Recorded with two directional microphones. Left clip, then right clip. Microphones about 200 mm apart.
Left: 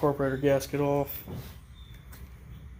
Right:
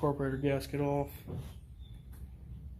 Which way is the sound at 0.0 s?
40° left (ahead or behind).